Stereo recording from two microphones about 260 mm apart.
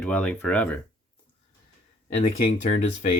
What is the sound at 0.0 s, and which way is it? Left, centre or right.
Speech, centre.